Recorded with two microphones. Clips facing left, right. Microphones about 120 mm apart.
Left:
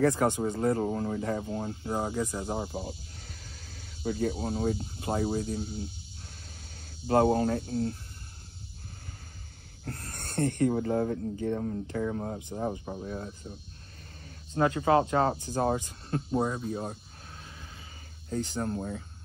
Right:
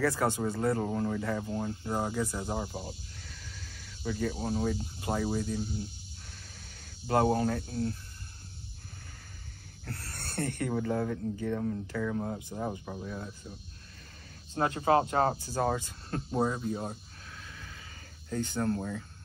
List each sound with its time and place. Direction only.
0.0 s speech: 20° left (ahead or behind)
3.2 s speech: 40° left (ahead or behind)
7.1 s speech: 30° left (ahead or behind)
9.8 s speech: 25° left (ahead or behind)
14.6 s speech: 30° right (ahead or behind)
15.3 s speech: 20° left (ahead or behind)
16.3 s speech: centre (ahead or behind)
16.9 s a sound: 35° left (ahead or behind)
18.3 s speech: 25° left (ahead or behind)